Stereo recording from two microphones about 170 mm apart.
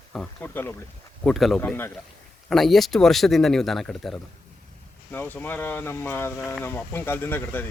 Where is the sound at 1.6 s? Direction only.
15° left (ahead or behind).